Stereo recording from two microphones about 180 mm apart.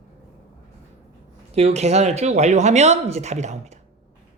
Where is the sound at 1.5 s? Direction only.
35° right (ahead or behind).